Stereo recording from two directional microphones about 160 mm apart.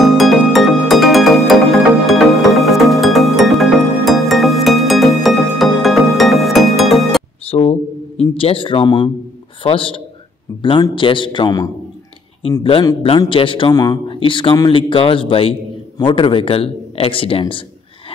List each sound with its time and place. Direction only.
0.0 s music: centre (ahead or behind)
7.4 s a sound: 40° left (ahead or behind)
8.2 s speech: 35° left (ahead or behind)
13.3 s speech: 35° left (ahead or behind)